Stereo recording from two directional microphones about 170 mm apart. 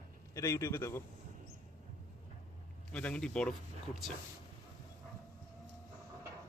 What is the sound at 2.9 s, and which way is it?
Speech, 5° left (ahead or behind).